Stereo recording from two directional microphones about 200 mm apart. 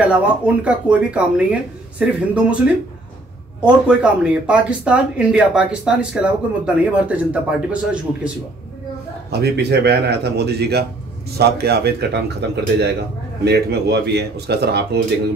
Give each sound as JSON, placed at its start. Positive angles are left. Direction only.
{"t": 0.0, "sound": "speech", "side_deg": -5}
{"t": 9.3, "sound": "a man's voice", "side_deg": -55}